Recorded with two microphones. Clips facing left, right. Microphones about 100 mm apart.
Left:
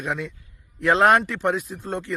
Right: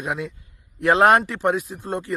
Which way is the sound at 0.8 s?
15° right (ahead or behind).